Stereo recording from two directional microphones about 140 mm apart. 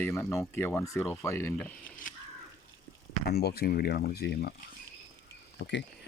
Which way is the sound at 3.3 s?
90° left.